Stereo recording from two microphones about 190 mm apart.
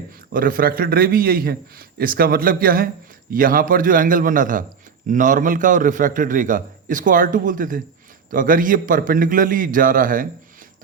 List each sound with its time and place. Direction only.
0.3 s a man's voice: 50° right (ahead or behind)